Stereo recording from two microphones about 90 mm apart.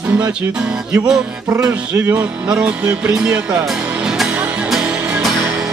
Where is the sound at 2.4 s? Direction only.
10° right (ahead or behind).